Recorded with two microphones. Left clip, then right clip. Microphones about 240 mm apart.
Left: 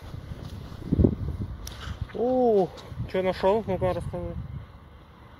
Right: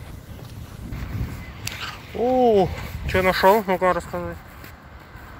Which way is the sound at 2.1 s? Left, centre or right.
Centre.